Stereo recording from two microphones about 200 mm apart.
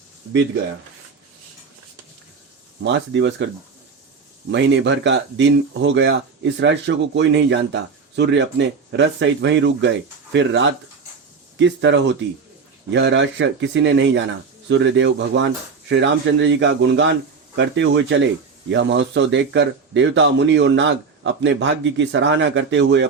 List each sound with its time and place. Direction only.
2.8 s speech: 65° right (ahead or behind)
4.5 s speech: 65° right (ahead or behind)